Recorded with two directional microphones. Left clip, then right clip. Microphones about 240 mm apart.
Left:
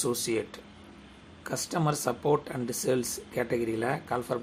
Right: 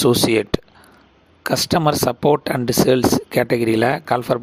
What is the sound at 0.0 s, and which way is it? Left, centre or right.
Speech, right.